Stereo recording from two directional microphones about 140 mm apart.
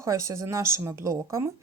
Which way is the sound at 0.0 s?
20° right (ahead or behind).